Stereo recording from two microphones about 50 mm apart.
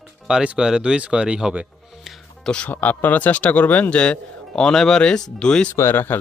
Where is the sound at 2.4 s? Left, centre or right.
Left.